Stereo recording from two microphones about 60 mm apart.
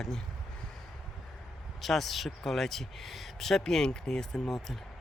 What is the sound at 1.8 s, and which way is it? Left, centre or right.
Speech, centre.